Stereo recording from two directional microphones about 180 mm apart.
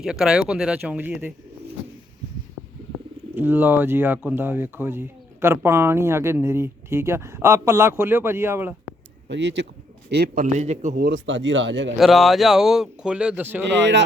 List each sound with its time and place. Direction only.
0.0 s speech: 5° right (ahead or behind)
3.3 s speech: 10° right (ahead or behind)
9.3 s speech: 75° right (ahead or behind)
10.1 s a man's voice: 55° right (ahead or behind); by 11.0 s 40° right (ahead or behind)
11.0 s speech: 85° right
11.9 s speech: centre (ahead or behind)